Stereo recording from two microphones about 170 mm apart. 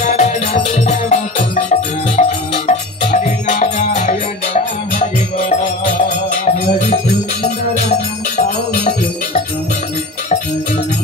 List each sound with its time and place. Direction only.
0.0 s music: 45° left (ahead or behind)
8.4 s music: 45° left (ahead or behind)